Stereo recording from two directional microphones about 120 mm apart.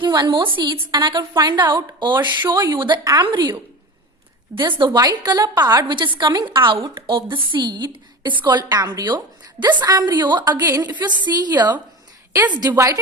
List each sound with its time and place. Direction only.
0.0 s a woman's voice: 40° right (ahead or behind)
10.7 s a woman's voice: 25° right (ahead or behind)
10.9 s a woman's voice: 40° right (ahead or behind)
12.3 s a woman's voice: 15° right (ahead or behind)
12.5 s a woman's voice: 30° right (ahead or behind)